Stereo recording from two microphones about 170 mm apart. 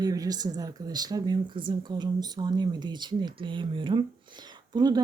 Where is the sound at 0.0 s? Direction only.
20° right (ahead or behind).